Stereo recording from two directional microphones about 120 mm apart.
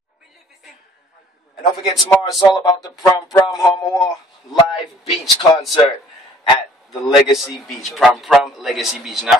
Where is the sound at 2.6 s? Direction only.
30° left (ahead or behind).